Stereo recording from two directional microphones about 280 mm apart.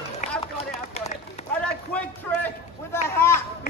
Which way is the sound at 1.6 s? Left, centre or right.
Centre.